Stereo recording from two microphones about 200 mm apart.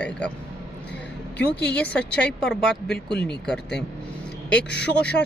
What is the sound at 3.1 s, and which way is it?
Speech, 55° left (ahead or behind).